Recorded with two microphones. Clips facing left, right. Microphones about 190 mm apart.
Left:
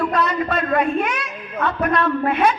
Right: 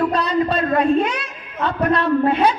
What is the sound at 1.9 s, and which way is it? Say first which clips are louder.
Speech: right 5 dB; 30° right (ahead or behind).